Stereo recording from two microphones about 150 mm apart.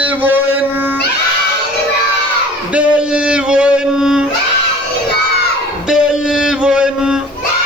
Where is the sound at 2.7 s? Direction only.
5° right (ahead or behind).